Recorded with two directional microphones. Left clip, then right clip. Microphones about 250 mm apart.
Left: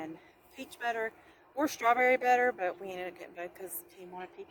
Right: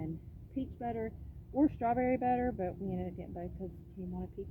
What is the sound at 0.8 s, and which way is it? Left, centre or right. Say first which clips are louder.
Speech: left 8 dB; centre.